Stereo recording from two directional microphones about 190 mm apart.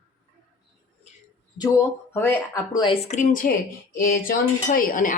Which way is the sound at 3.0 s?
40° left (ahead or behind).